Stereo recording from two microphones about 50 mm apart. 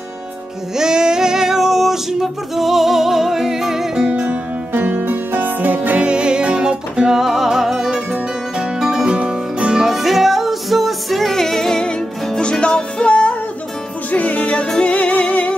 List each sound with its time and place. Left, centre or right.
0.7 s music: centre
4.1 s music: right
4.7 s music: right
6.0 s music: centre
9.8 s music: centre
12.4 s music: centre